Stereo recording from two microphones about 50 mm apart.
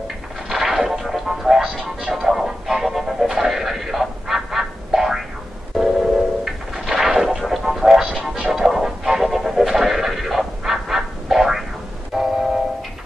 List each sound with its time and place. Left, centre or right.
0.5 s music: centre
5.8 s a sound: centre
7.4 s music: centre
8.0 s music: right
8.5 s music: centre